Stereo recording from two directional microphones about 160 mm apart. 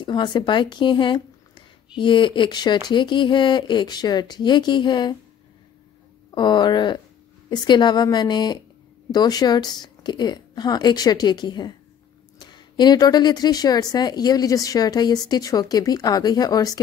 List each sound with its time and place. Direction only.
0.0 s a woman's voice: 30° left (ahead or behind)
6.3 s a woman's voice: 30° left (ahead or behind)